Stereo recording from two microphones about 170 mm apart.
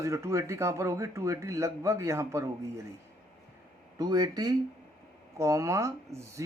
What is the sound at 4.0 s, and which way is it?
Speech, 20° right (ahead or behind).